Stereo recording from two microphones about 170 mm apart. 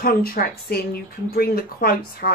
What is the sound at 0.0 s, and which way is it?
Speech, 60° left (ahead or behind).